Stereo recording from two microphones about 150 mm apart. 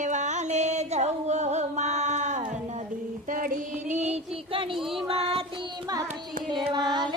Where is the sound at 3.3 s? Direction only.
65° right (ahead or behind); by 4.7 s 35° right (ahead or behind).